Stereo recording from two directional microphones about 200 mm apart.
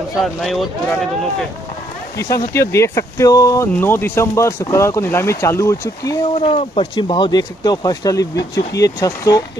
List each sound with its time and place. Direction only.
0.2 s speech: centre (ahead or behind)
2.1 s speech: 15° left (ahead or behind)
6.4 s speech: 30° left (ahead or behind)